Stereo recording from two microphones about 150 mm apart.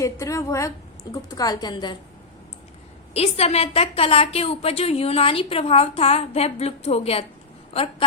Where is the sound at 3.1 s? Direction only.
45° left (ahead or behind).